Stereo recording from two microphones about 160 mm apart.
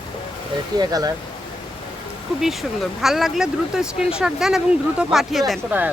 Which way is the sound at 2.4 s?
Centre (ahead or behind).